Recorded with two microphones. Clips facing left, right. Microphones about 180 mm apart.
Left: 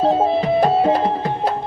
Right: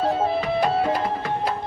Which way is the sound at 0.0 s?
25° left (ahead or behind).